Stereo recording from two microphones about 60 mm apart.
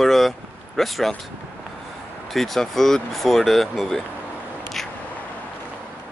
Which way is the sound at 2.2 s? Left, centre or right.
Centre.